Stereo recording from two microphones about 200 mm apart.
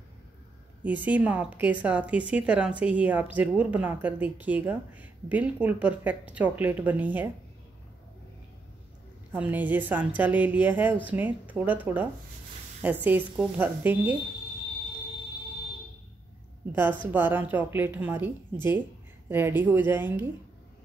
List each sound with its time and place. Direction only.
0.8 s speech: 5° right (ahead or behind)
9.3 s speech: 10° right (ahead or behind)
17.0 s speech: 10° right (ahead or behind)